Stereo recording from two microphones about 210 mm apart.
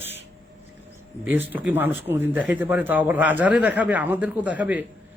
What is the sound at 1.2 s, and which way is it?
Speech, 10° right (ahead or behind).